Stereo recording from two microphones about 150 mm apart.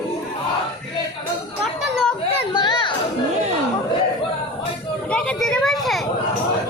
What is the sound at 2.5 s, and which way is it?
Music, 35° left (ahead or behind).